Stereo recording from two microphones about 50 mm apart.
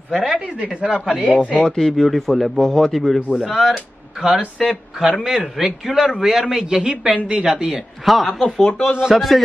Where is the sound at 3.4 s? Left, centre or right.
Centre.